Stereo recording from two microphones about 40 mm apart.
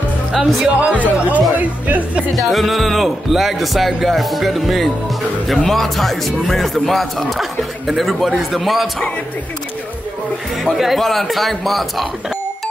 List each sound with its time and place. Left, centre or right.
0.3 s speech: centre
0.7 s speech: right
2.3 s speech: centre
10.8 s speech: centre